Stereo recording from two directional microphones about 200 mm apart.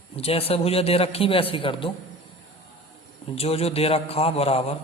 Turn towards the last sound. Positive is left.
turn(degrees=30)  # may be behind; listen again after turning